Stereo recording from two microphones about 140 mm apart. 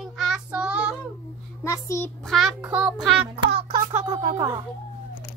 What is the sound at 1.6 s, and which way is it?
Speech, 20° left (ahead or behind).